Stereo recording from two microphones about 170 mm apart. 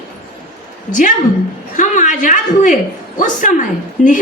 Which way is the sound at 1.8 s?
50° left (ahead or behind).